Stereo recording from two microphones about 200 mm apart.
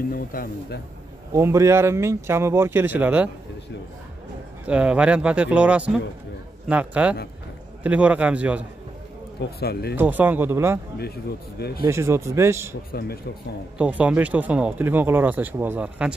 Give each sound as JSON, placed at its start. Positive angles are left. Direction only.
{"t": 0.1, "sound": "speech", "side_deg": 45}
{"t": 1.3, "sound": "speech", "side_deg": -15}
{"t": 4.6, "sound": "speech", "side_deg": -5}
{"t": 9.4, "sound": "speech", "side_deg": 50}
{"t": 9.9, "sound": "speech", "side_deg": -10}
{"t": 11.8, "sound": "speech", "side_deg": -15}
{"t": 12.9, "sound": "speech", "side_deg": 55}
{"t": 13.7, "sound": "speech", "side_deg": -5}